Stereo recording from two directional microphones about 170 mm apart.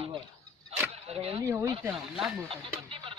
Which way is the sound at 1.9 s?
Centre (ahead or behind).